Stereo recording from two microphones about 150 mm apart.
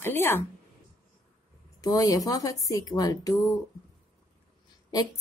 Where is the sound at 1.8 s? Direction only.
25° left (ahead or behind).